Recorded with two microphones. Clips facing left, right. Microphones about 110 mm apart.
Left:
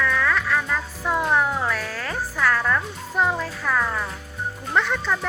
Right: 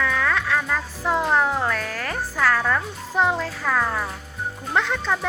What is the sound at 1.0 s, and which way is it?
Speech, 90° right.